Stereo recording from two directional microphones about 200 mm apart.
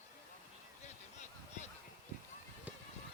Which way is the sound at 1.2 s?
35° left (ahead or behind).